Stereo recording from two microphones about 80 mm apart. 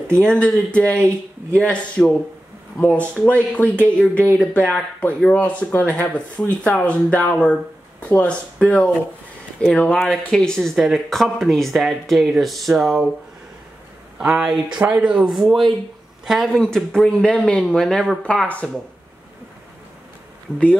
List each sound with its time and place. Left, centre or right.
0.2 s speech: centre
14.1 s speech: centre